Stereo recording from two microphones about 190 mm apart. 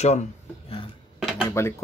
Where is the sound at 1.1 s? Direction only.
Centre (ahead or behind).